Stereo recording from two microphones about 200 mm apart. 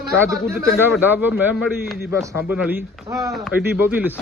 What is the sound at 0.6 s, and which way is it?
Speech, 10° right (ahead or behind).